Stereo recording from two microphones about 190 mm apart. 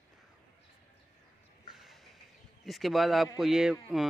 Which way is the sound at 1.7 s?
Centre (ahead or behind).